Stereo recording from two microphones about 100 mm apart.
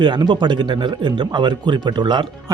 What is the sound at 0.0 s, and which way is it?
Speech, 50° right (ahead or behind).